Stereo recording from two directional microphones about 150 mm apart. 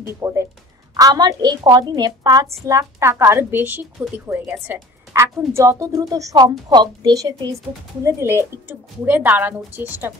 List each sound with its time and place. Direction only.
0.0 s a woman's voice: 20° right (ahead or behind)